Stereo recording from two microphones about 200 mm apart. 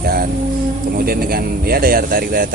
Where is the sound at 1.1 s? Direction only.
50° right (ahead or behind).